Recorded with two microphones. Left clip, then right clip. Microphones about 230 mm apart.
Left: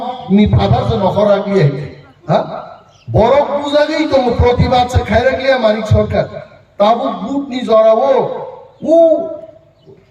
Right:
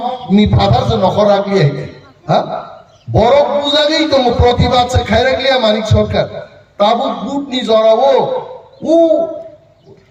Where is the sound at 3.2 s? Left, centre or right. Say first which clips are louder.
Right 1 dB; right.